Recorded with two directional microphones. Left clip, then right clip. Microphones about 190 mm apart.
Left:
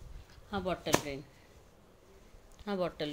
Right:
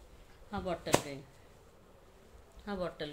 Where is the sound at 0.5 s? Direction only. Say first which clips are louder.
Left 2 dB; 45° left (ahead or behind).